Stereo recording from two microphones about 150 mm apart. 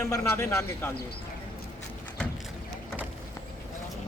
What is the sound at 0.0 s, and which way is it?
Speech, 20° left (ahead or behind).